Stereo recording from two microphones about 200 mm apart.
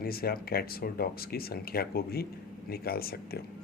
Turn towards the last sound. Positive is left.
turn(degrees=50)  # may be behind; listen again after turning